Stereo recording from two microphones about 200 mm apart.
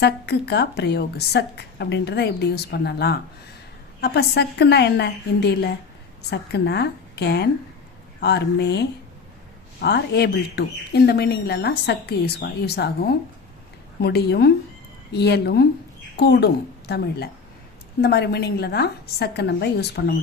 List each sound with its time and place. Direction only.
0.0 s a woman's voice: 55° left (ahead or behind)